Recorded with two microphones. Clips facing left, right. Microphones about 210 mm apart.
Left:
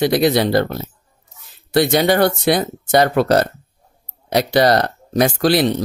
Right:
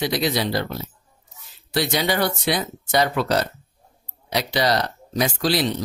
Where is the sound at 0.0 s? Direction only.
55° left (ahead or behind).